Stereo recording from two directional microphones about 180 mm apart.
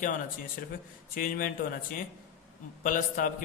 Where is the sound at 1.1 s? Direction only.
50° left (ahead or behind).